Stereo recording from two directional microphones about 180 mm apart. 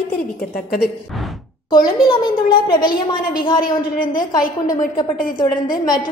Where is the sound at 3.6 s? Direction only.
50° left (ahead or behind).